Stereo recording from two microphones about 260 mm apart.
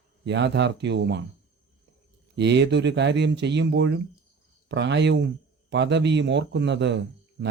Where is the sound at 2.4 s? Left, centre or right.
Right.